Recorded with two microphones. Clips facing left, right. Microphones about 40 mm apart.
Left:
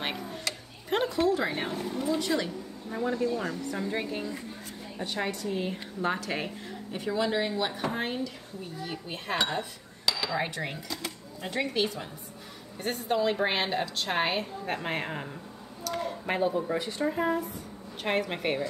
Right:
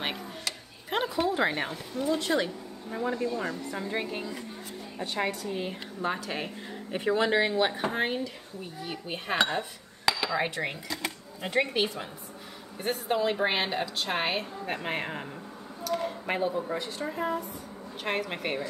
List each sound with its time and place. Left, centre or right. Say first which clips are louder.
0.0 s a sound: even; centre
1.1 s speech: left 3 dB; right
1.5 s speech: left 1 dB; right
2.9 s a woman's voice: left 1 dB; centre
6.0 s speech: left 1 dB; centre
6.9 s speech: right 3 dB; right
7.7 s speech: right 2 dB; centre
12.8 s a woman's voice: even; centre